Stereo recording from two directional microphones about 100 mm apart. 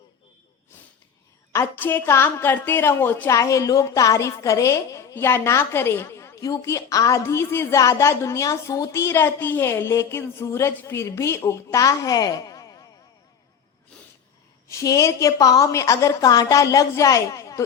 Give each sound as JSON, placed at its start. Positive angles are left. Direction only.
{"t": 1.5, "sound": "a woman's voice", "side_deg": 20}
{"t": 3.2, "sound": "a woman's voice", "side_deg": 30}
{"t": 14.7, "sound": "a woman's voice", "side_deg": 30}